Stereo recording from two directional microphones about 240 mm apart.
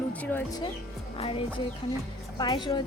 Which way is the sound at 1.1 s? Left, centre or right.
Left.